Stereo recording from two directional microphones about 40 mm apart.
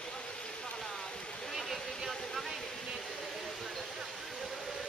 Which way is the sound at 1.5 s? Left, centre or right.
Centre.